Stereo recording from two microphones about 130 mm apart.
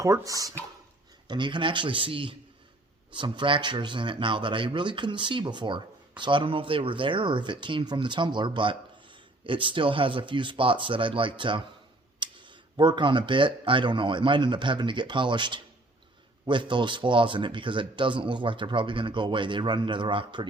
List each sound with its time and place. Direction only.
0.0 s speech: 25° right (ahead or behind)
1.3 s speech: 35° right (ahead or behind)